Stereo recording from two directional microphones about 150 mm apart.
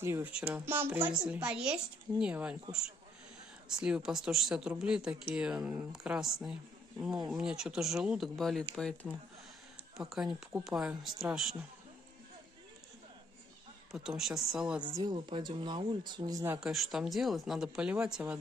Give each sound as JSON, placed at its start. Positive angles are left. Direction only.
{"t": 0.0, "sound": "speech", "side_deg": -15}
{"t": 3.6, "sound": "speech", "side_deg": -5}
{"t": 13.9, "sound": "speech", "side_deg": -5}
{"t": 14.8, "sound": "speech", "side_deg": -30}
{"t": 16.5, "sound": "speech", "side_deg": -5}